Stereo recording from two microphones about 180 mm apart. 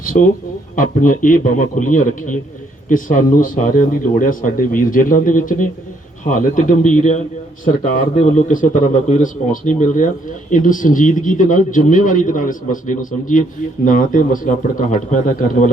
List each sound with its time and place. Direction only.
0.0 s speech: 50° left (ahead or behind)
8.4 s speech: 45° left (ahead or behind)